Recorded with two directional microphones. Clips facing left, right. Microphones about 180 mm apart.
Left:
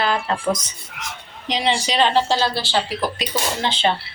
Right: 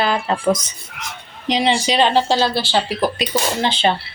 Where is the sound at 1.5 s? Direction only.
15° right (ahead or behind).